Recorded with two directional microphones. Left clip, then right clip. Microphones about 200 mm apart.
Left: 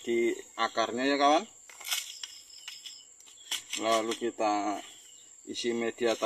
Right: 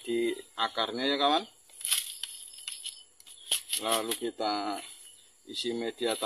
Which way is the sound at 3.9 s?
30° left (ahead or behind).